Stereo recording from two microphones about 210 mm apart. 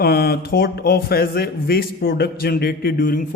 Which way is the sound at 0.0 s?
50° left (ahead or behind).